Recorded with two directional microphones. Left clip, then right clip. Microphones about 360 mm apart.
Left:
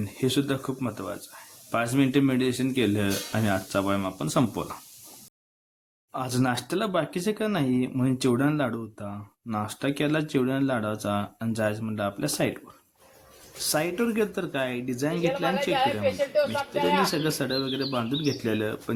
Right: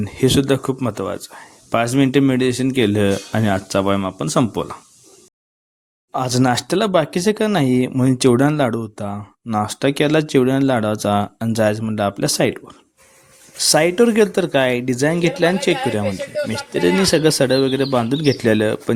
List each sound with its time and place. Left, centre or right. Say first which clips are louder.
0.0 s speech: right 10 dB; left
6.1 s speech: right 10 dB; left
17.1 s speech: right 13 dB; left